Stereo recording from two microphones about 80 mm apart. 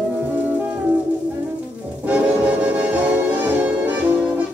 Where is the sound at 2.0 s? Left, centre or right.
Centre.